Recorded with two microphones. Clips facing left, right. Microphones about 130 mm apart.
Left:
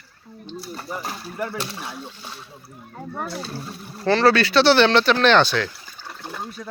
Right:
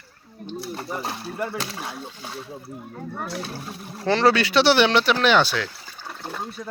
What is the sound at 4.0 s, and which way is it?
Speech, 15° right (ahead or behind).